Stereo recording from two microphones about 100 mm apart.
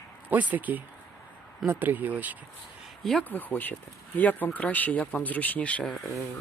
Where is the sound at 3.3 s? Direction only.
20° left (ahead or behind).